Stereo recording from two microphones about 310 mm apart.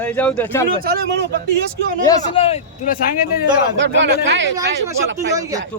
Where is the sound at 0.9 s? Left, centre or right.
Right.